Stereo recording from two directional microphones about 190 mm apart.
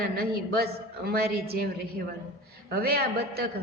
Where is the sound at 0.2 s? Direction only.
55° right (ahead or behind).